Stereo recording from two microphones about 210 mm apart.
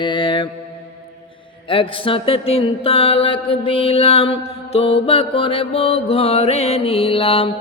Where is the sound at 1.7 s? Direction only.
25° left (ahead or behind).